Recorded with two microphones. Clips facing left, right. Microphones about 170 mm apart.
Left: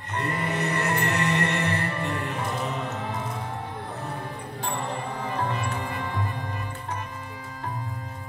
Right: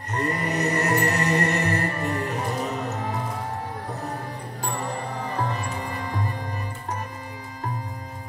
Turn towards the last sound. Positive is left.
turn(degrees=-40)  # may be behind; listen again after turning